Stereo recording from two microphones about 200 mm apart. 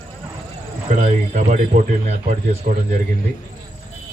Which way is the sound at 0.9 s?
40° right (ahead or behind).